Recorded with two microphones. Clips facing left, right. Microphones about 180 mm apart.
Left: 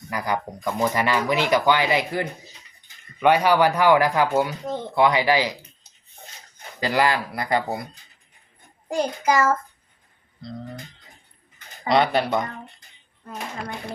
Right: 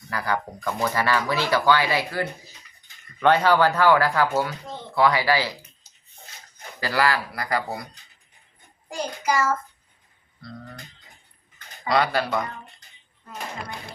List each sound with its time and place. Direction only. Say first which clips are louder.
0.1 s speech: left 1 dB; 15° left (ahead or behind)
6.7 s speech: left 2 dB; 20° left (ahead or behind)
8.9 s child singing: left 4 dB; 45° left (ahead or behind)
10.4 s speech: left 4 dB; 20° left (ahead or behind)
11.9 s speech: left 3 dB; 20° left (ahead or behind)